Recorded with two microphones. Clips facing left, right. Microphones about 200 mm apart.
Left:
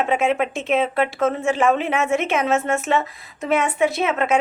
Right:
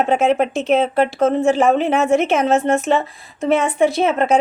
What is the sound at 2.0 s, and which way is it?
Speech, centre (ahead or behind).